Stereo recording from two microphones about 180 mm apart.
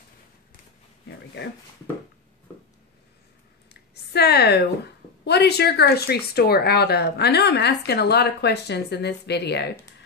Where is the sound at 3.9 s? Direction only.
65° left (ahead or behind).